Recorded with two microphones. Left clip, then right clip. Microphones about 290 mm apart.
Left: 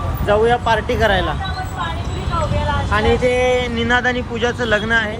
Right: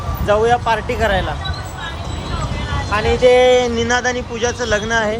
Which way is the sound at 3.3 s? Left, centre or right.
Right.